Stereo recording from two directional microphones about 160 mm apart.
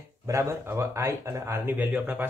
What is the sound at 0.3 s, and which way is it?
Speech, 15° right (ahead or behind).